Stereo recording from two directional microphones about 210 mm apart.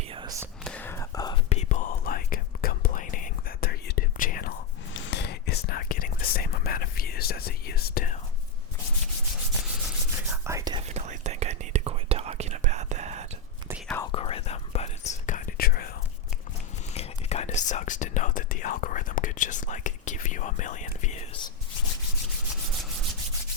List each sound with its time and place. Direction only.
0.1 s whispering: 20° right (ahead or behind)
0.6 s whispering: 5° left (ahead or behind)
1.5 s whispering: 30° left (ahead or behind)
4.9 s whispering: 60° left (ahead or behind); by 8.2 s 40° left (ahead or behind)
10.2 s whispering: 10° right (ahead or behind)
10.8 s whispering: 30° right (ahead or behind)
13.7 s whispering: 5° right (ahead or behind)
14.1 s whispering: 25° left (ahead or behind); by 15.9 s 45° left (ahead or behind)
16.9 s whispering: 30° left (ahead or behind)